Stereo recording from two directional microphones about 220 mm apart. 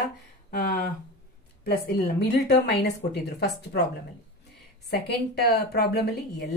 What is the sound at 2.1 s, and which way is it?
Speech, 50° left (ahead or behind).